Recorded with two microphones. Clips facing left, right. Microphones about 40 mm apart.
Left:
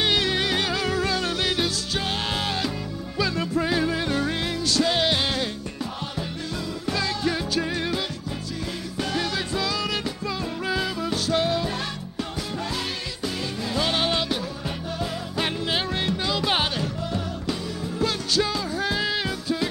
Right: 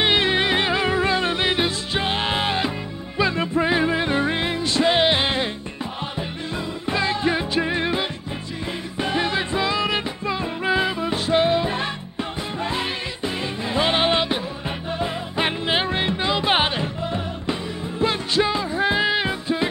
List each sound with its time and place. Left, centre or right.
0.0 s music: right
6.9 s music: right